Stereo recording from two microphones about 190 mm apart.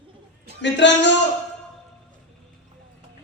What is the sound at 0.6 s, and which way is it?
Speech, 70° left (ahead or behind).